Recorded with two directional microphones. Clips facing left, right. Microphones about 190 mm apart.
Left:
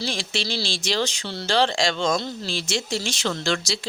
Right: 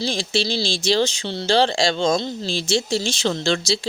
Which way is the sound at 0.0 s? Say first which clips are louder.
Right 5 dB; 30° right (ahead or behind).